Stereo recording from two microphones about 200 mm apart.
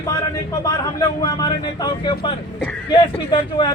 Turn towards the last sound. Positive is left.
turn(degrees=25)  # may be behind; listen again after turning